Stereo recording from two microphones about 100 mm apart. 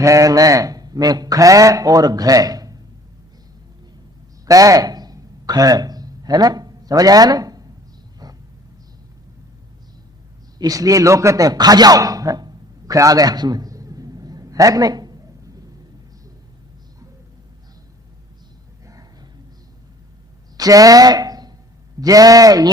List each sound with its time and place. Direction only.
0.0 s speech: 35° right (ahead or behind)
4.4 s a sound: 35° right (ahead or behind)
10.6 s speech: 35° right (ahead or behind)
20.6 s speech: 35° right (ahead or behind)